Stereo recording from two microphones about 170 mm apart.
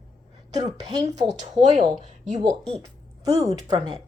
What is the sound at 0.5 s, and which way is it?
Speech, 25° right (ahead or behind).